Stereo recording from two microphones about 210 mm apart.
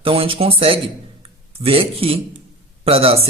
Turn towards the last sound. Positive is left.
turn(degrees=-30)  # may be behind; listen again after turning